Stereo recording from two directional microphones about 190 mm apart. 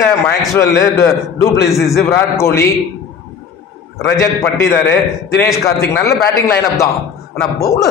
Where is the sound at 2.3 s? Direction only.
15° left (ahead or behind).